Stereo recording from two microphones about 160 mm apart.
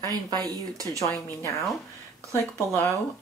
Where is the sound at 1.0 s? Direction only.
15° left (ahead or behind).